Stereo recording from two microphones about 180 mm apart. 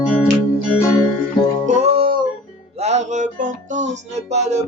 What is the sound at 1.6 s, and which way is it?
Music, 40° right (ahead or behind).